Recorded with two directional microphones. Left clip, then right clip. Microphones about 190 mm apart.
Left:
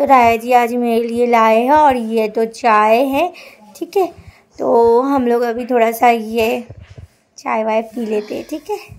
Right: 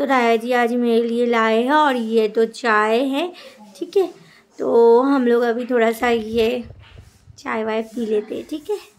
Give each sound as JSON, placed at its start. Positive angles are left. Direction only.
{"t": 0.0, "sound": "a woman's voice", "side_deg": 15}
{"t": 4.6, "sound": "a woman's voice", "side_deg": 15}